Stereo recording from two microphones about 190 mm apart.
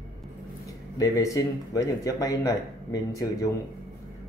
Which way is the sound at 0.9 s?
20° left (ahead or behind).